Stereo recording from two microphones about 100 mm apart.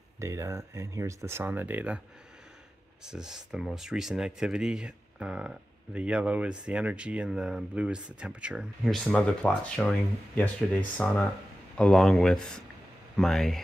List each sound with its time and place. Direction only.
0.2 s speech: 30° right (ahead or behind)
3.0 s speech: 5° right (ahead or behind)
8.8 s speech: centre (ahead or behind)